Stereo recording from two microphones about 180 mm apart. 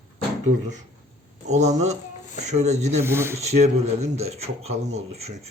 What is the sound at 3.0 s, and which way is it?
Speech, 15° right (ahead or behind).